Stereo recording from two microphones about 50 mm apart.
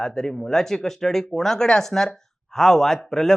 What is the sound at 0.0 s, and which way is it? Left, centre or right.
A man's voice, centre.